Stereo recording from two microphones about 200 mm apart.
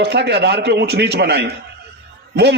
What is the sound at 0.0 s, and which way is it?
A man's voice, 55° right (ahead or behind).